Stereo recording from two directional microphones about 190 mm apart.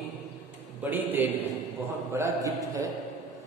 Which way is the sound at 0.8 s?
10° right (ahead or behind).